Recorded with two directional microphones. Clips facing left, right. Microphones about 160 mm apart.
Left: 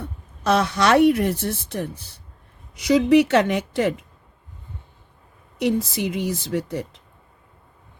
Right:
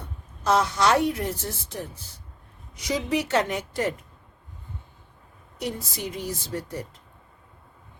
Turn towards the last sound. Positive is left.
turn(degrees=90)